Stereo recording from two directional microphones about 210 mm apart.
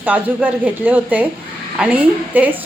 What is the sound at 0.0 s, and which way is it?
Speech, 5° right (ahead or behind).